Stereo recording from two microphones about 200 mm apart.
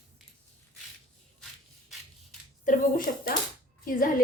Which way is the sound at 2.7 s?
40° left (ahead or behind).